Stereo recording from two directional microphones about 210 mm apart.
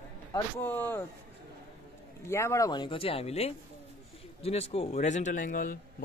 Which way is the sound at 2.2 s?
15° left (ahead or behind).